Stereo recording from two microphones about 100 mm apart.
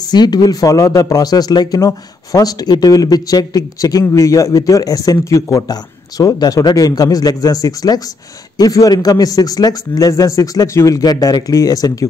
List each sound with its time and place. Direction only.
0.1 s speech: 45° left (ahead or behind)